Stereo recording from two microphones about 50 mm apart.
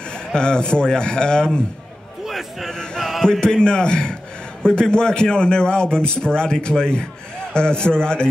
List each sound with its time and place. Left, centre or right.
0.3 s speech: centre
2.2 s a man's voice: centre
3.0 s chant: centre
3.3 s speech: centre